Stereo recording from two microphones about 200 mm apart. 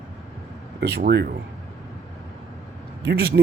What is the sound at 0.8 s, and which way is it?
Speech, 55° right (ahead or behind).